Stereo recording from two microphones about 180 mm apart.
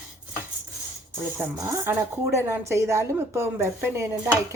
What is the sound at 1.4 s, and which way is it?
A woman's voice, 15° right (ahead or behind).